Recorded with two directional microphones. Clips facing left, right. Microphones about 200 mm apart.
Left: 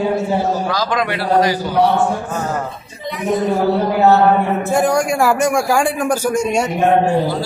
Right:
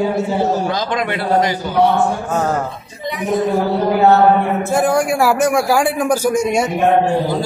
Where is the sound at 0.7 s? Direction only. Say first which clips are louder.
Even; 25° right (ahead or behind).